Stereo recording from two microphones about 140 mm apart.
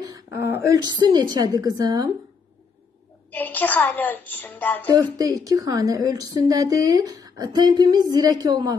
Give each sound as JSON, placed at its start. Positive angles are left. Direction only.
{"t": 0.0, "sound": "a sound", "side_deg": -20}
{"t": 0.8, "sound": "a woman's voice", "side_deg": -30}
{"t": 3.3, "sound": "a woman's voice", "side_deg": 10}
{"t": 4.9, "sound": "a woman's voice", "side_deg": -25}